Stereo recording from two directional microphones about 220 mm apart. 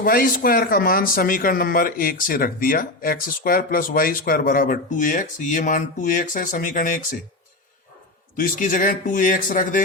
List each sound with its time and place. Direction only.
0.0 s speech: 40° left (ahead or behind)
8.4 s speech: 40° left (ahead or behind)